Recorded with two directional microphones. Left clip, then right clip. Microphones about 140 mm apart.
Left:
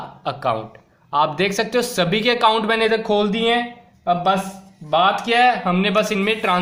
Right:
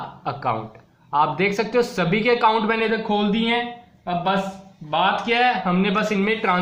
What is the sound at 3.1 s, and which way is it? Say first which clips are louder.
Speech: left 4 dB; 65° left (ahead or behind).